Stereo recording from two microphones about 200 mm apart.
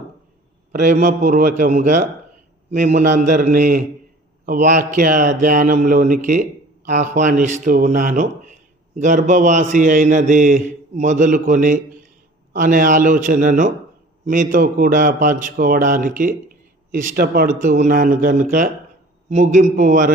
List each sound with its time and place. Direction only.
0.7 s a man's voice: 40° right (ahead or behind)